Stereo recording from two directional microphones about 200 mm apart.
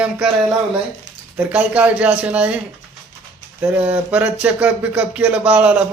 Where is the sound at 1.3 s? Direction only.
5° right (ahead or behind).